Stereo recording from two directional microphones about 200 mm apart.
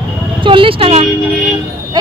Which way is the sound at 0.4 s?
25° right (ahead or behind).